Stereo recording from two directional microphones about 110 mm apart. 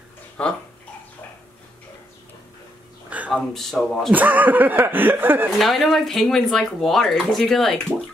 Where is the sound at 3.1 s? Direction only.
15° right (ahead or behind).